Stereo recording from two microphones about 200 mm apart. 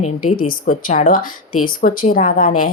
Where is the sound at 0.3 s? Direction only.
45° left (ahead or behind).